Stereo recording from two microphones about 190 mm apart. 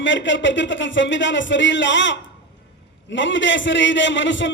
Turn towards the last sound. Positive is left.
turn(degrees=75)  # may be behind; listen again after turning